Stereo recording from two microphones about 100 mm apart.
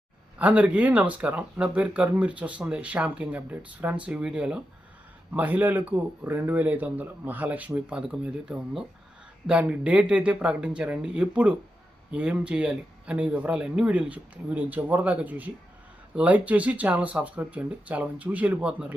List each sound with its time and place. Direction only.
0.3 s speech: 15° right (ahead or behind)